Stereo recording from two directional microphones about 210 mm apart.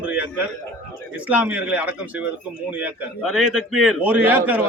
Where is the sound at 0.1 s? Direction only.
5° right (ahead or behind).